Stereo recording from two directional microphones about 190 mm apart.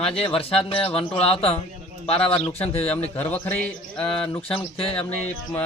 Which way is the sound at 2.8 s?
10° left (ahead or behind).